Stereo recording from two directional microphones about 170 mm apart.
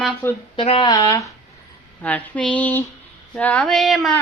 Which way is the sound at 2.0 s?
10° left (ahead or behind).